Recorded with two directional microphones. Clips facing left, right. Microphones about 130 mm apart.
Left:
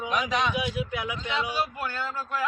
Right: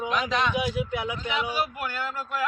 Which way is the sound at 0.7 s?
25° right (ahead or behind).